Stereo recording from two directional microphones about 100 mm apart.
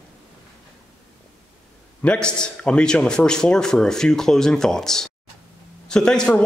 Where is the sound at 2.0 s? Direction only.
10° left (ahead or behind).